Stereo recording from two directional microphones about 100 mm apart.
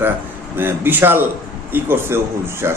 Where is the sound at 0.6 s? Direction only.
20° right (ahead or behind).